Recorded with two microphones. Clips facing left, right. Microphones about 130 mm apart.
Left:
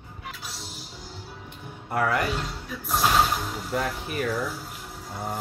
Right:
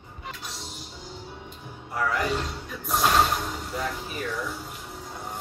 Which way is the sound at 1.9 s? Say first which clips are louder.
Left 3 dB; 60° left (ahead or behind).